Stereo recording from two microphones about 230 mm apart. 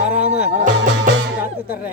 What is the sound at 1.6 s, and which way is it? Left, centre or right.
Speech, left.